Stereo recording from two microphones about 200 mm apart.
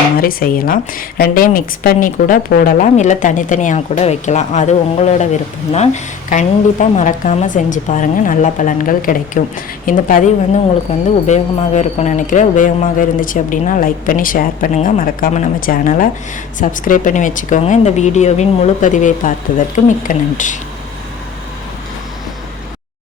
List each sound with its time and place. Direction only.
0.2 s a woman's voice: 45° left (ahead or behind)